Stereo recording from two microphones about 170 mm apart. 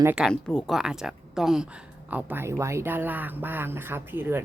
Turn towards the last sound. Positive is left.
turn(degrees=-15)  # may be behind; listen again after turning